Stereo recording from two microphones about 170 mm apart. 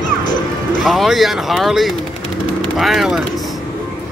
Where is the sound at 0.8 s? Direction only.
Centre (ahead or behind).